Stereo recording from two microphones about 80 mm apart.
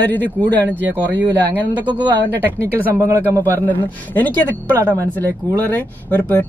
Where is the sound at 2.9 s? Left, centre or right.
Right.